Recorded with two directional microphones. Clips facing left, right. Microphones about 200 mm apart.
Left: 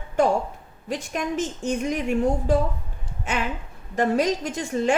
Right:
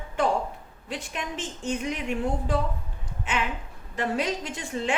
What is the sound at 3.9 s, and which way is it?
Speech, 45° left (ahead or behind).